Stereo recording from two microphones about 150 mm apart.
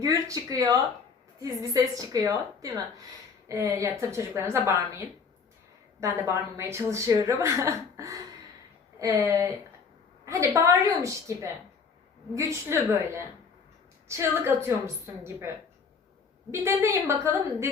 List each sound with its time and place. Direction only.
0.0 s a woman's voice: 20° right (ahead or behind)
16.5 s a woman's voice: 15° right (ahead or behind)